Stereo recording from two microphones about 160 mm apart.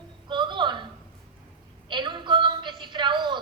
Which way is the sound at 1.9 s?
30° right (ahead or behind).